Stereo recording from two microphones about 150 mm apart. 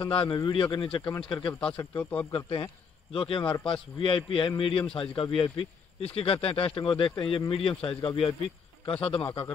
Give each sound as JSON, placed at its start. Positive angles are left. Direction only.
{"t": 0.0, "sound": "speech", "side_deg": 35}
{"t": 1.5, "sound": "speech", "side_deg": 5}
{"t": 2.3, "sound": "speech", "side_deg": 35}